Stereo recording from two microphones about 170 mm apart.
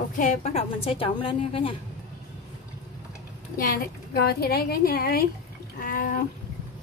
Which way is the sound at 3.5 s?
60° left (ahead or behind).